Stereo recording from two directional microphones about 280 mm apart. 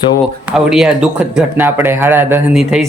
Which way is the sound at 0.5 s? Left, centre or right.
Centre.